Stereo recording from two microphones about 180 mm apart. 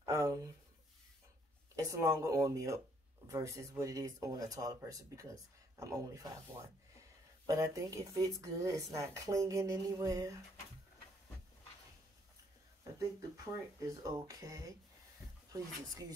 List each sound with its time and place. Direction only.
0.0 s a sound: 20° right (ahead or behind)
1.8 s speech: 15° right (ahead or behind)
13.8 s speech: 20° right (ahead or behind)